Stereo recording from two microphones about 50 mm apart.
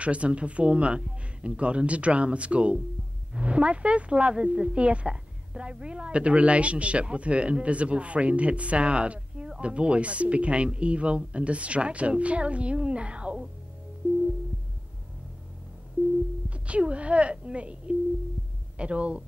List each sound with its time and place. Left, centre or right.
0.0 s speech: right
16.4 s speech: right